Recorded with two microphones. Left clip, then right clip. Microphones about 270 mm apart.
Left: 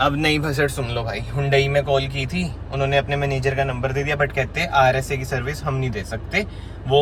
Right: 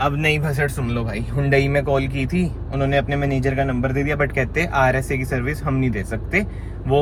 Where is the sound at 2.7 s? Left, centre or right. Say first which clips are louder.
Even; left.